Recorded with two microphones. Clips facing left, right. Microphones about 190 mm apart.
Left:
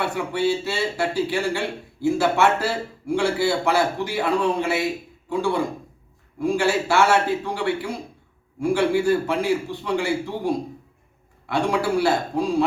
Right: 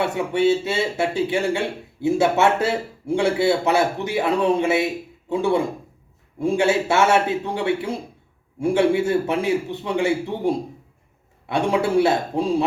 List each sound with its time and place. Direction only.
0.0 s speech: 20° right (ahead or behind)